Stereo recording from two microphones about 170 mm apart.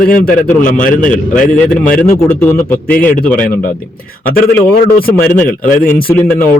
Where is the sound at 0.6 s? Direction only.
55° left (ahead or behind).